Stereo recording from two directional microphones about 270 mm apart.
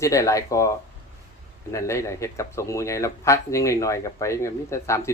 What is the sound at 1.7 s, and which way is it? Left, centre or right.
Speech, centre.